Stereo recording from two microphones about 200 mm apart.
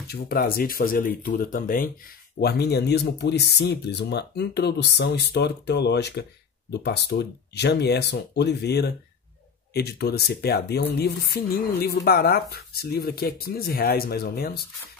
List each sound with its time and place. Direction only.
0.1 s speech: 50° left (ahead or behind)